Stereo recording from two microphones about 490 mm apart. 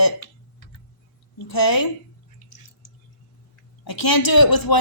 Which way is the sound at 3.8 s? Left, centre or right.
Left.